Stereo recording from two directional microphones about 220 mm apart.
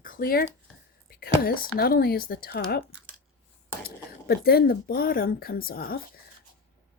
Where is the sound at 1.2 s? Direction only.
45° left (ahead or behind).